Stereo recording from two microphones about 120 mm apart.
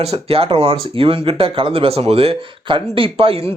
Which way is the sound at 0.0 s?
55° right (ahead or behind).